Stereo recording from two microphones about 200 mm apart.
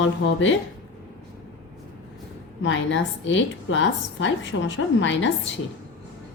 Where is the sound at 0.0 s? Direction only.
70° left (ahead or behind).